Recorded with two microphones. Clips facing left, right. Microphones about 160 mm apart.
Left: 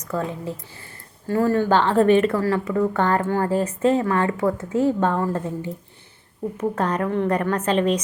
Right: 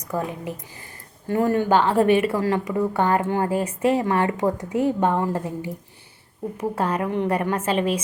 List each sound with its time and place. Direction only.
0.1 s speech: 15° right (ahead or behind)